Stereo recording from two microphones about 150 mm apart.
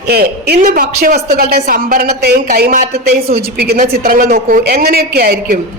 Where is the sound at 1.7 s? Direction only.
70° right (ahead or behind).